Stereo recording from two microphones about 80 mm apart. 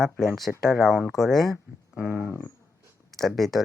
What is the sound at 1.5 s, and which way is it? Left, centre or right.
Speech, centre.